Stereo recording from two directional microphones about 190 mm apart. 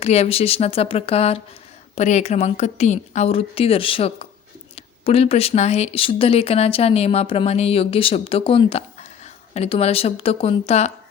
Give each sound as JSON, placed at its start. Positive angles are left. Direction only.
{"t": 0.0, "sound": "speech", "side_deg": 35}